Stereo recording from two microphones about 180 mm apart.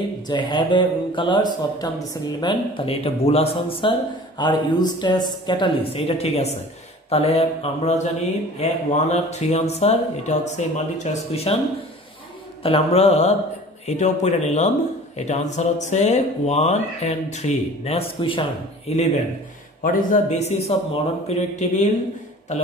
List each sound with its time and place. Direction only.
0.3 s speech: 25° left (ahead or behind)
12.6 s speech: 35° left (ahead or behind)
19.8 s speech: 50° left (ahead or behind)